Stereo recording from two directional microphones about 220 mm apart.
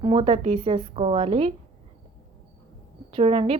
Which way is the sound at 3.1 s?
25° right (ahead or behind).